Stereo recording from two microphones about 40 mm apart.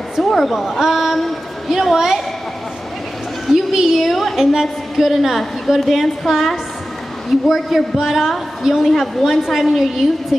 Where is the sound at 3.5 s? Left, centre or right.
Centre.